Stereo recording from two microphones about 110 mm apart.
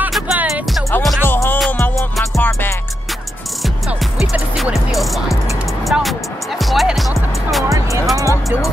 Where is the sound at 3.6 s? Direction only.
Centre (ahead or behind).